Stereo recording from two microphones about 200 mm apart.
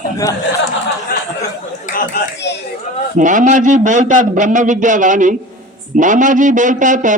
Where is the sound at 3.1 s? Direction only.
40° right (ahead or behind).